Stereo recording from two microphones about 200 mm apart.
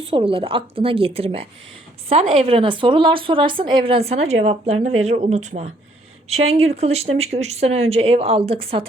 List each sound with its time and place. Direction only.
0.0 s a woman's voice: 25° right (ahead or behind)